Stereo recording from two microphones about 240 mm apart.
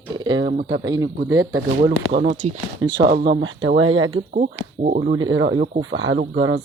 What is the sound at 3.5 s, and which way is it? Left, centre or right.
Speech, right.